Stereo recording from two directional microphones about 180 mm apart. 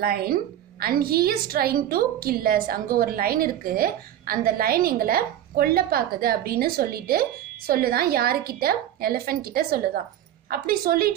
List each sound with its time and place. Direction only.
0.0 s a woman's voice: 60° right (ahead or behind)